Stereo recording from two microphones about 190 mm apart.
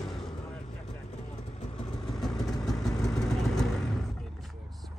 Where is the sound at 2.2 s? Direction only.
Centre (ahead or behind).